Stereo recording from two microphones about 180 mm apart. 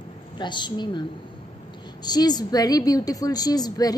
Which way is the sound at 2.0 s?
20° left (ahead or behind).